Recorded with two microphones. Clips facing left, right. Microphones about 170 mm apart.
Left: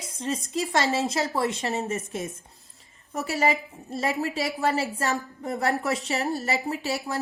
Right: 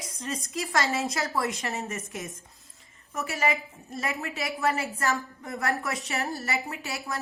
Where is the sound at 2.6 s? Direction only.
35° left (ahead or behind).